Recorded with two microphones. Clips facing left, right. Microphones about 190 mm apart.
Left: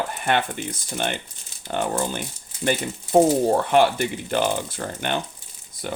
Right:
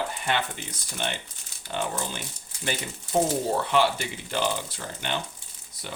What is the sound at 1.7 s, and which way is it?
Speech, 55° left (ahead or behind).